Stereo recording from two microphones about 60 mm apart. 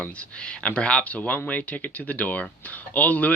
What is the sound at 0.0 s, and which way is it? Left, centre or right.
Speech, left.